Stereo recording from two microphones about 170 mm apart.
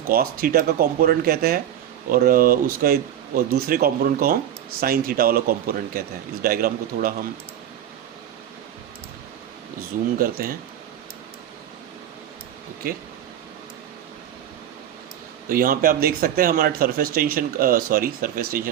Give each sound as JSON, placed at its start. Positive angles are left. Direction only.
{"t": 0.1, "sound": "speech", "side_deg": -60}
{"t": 10.2, "sound": "speech", "side_deg": -55}
{"t": 15.4, "sound": "speech", "side_deg": -55}